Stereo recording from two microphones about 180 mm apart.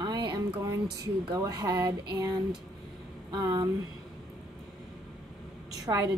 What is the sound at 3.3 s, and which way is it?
Speech, 25° right (ahead or behind).